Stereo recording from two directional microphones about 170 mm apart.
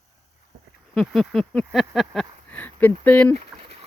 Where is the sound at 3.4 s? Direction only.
40° right (ahead or behind).